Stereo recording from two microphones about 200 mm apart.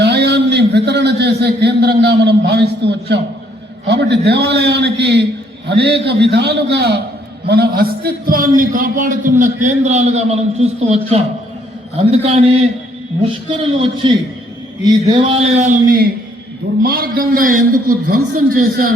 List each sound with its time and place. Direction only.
0.0 s a sound: 55° right (ahead or behind)
3.8 s a man's voice: 55° right (ahead or behind); by 12.6 s 30° right (ahead or behind)
14.8 s a man's voice: 20° right (ahead or behind)
15.4 s a man's voice: 35° right (ahead or behind)